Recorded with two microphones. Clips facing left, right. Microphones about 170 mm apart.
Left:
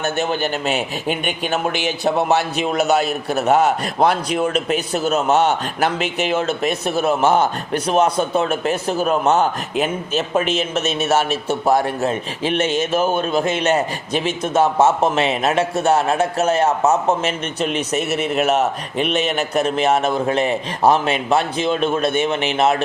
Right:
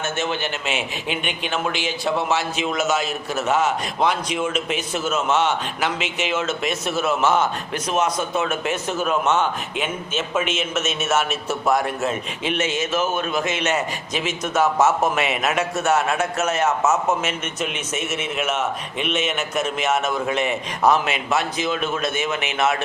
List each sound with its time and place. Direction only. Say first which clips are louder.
0.0 s a man's voice: left 4 dB; 40° left (ahead or behind)
1.8 s a man's voice: left 4 dB; 60° left (ahead or behind)
3.1 s a man's voice: left 5 dB; 35° left (ahead or behind)